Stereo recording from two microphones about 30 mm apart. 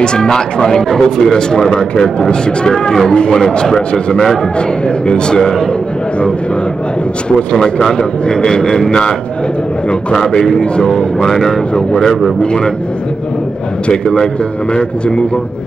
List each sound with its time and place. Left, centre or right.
0.0 s speech: left
2.1 s speech: left
4.6 s speech: left
7.2 s speech: left
10.1 s speech: left
10.6 s speech: left
11.2 s speech: centre
11.7 s speech: left
14.0 s speech: left